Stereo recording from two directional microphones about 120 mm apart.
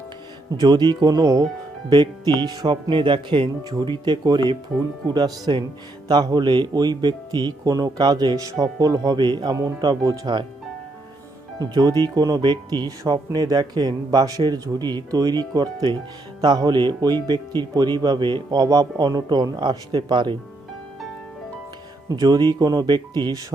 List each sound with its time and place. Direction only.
0.5 s speech: 35° right (ahead or behind)
11.6 s speech: 35° right (ahead or behind)
22.1 s speech: 35° right (ahead or behind)